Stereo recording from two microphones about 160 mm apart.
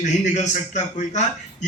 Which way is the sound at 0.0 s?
45° left (ahead or behind).